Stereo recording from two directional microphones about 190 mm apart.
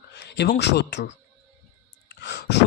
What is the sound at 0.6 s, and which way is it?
A man's voice, 65° left (ahead or behind).